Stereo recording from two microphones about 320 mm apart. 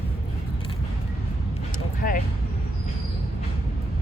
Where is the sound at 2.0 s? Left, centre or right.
Left.